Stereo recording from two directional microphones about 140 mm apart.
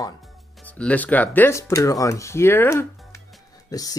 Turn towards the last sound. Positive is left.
turn(degrees=25)  # may be behind; listen again after turning